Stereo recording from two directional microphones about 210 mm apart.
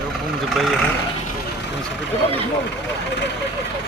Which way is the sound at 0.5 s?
Centre (ahead or behind).